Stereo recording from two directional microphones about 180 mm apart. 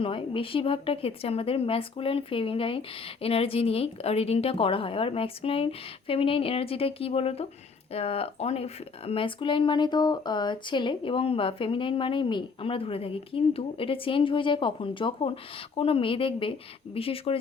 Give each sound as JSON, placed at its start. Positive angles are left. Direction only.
{"t": 0.0, "sound": "speech", "side_deg": 30}